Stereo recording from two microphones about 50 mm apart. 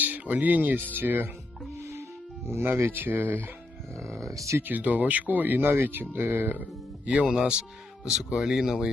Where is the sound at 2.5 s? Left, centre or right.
Right.